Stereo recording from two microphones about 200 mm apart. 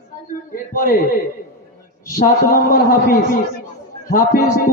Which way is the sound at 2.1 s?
45° left (ahead or behind).